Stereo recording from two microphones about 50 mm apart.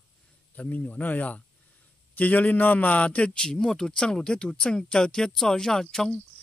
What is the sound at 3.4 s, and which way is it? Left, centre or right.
Speech, centre.